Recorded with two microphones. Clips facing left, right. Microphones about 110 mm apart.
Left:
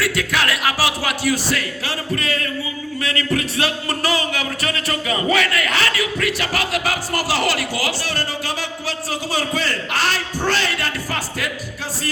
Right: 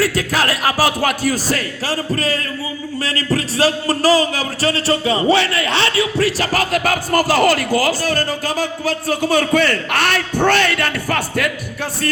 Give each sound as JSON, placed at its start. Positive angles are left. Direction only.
{"t": 0.0, "sound": "a man's voice", "side_deg": -40}